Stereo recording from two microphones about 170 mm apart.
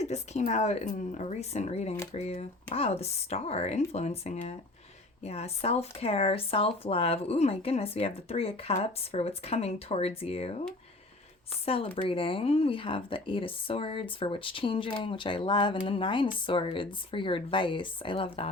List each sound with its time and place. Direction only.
0.0 s speech: 40° left (ahead or behind)